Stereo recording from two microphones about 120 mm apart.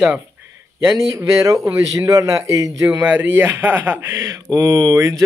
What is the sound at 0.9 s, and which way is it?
Speech, 25° right (ahead or behind).